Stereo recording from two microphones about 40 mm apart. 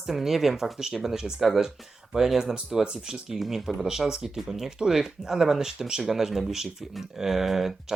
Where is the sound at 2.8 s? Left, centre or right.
Right.